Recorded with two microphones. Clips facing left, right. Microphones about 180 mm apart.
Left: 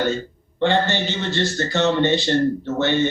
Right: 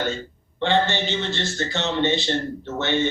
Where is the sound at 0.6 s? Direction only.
40° left (ahead or behind).